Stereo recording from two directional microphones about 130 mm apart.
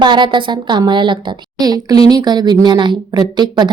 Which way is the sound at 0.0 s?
35° right (ahead or behind).